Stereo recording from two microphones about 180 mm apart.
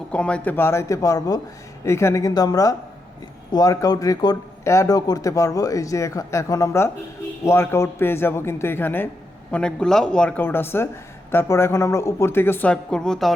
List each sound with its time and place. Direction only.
0.1 s a man's voice: 5° left (ahead or behind)